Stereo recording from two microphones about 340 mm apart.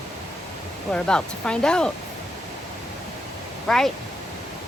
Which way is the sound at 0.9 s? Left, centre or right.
Centre.